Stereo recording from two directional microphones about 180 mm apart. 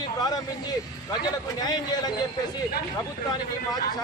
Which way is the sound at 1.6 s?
20° left (ahead or behind).